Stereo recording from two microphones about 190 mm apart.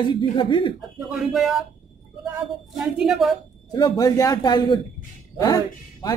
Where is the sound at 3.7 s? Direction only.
20° left (ahead or behind).